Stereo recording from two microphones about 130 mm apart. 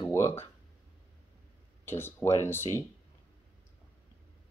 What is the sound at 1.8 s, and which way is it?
Speech, 15° left (ahead or behind).